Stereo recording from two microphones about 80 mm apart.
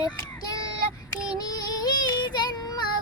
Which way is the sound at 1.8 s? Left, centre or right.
Left.